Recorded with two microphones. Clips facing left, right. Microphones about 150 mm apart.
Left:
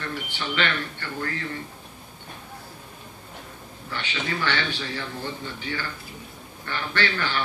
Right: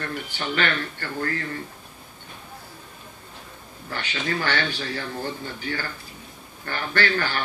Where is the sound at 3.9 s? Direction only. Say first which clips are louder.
Right 2 dB; 45° right (ahead or behind).